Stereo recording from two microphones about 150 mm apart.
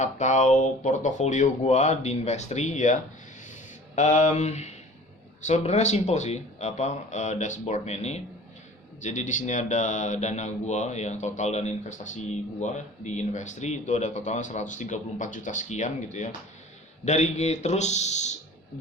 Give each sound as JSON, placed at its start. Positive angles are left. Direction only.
{"t": 0.0, "sound": "speech", "side_deg": 50}
{"t": 3.4, "sound": "a sound", "side_deg": 50}
{"t": 5.4, "sound": "speech", "side_deg": 50}